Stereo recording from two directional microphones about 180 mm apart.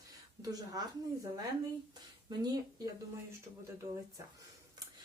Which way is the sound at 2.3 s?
20° right (ahead or behind).